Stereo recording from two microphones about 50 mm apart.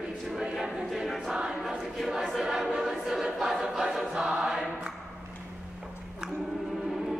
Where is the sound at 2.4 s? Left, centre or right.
Centre.